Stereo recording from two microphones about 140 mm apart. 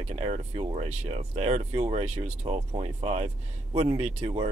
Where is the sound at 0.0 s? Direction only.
50° right (ahead or behind).